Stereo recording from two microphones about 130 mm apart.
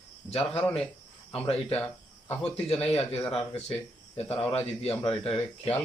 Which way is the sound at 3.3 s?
50° left (ahead or behind).